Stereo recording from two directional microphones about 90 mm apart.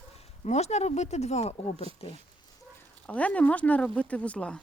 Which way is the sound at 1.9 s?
90° right.